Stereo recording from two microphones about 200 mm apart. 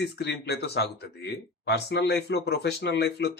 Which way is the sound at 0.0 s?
55° left (ahead or behind).